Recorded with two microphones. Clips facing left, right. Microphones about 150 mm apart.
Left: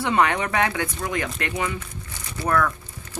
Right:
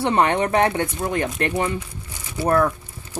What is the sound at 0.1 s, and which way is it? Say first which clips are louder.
Speech: right 2 dB; 30° right (ahead or behind).